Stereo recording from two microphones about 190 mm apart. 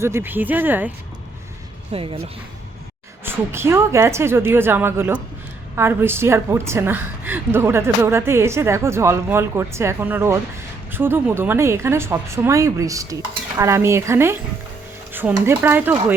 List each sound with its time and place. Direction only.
0.0 s a woman's voice: 15° right (ahead or behind)
1.9 s speech: 30° right (ahead or behind)
3.2 s a woman's voice: 15° right (ahead or behind)